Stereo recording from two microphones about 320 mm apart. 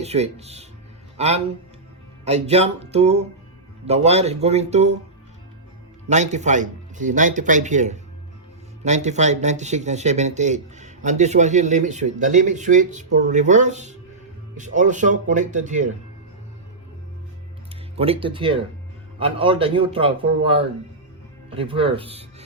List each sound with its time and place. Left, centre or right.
0.0 s a man's voice: centre
6.1 s speech: right
17.9 s a man's voice: centre